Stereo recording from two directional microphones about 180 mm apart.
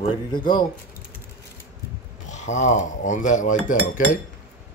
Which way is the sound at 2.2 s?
40° left (ahead or behind).